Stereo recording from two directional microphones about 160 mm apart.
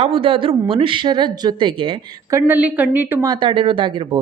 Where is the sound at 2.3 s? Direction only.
10° right (ahead or behind).